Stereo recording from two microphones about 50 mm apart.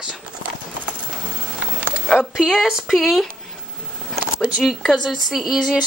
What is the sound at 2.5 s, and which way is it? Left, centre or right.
Speech, centre.